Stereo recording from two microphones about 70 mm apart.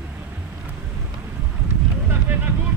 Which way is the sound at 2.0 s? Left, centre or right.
Right.